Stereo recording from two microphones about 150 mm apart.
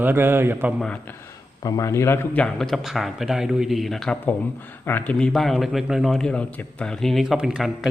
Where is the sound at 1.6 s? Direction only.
25° left (ahead or behind).